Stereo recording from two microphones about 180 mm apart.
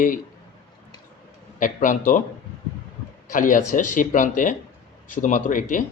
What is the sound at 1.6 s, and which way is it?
Speech, 45° left (ahead or behind).